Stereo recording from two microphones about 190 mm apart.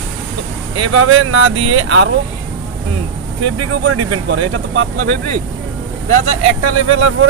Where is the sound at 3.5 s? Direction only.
90° right.